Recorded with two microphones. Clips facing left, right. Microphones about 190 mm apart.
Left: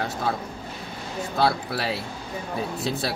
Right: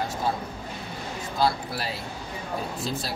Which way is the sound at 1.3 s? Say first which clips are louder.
Left 2 dB; 65° left (ahead or behind).